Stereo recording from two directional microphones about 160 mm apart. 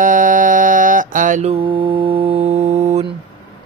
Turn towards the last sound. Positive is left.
turn(degrees=-40)  # may be behind; listen again after turning